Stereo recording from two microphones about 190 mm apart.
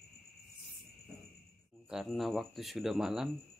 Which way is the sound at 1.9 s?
Centre (ahead or behind).